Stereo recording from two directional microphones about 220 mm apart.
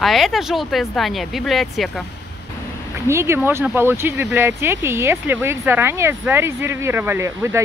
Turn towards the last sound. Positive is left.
turn(degrees=-10)  # may be behind; listen again after turning